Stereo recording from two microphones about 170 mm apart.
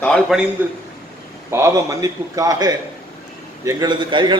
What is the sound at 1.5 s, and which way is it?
A man's voice, 20° right (ahead or behind).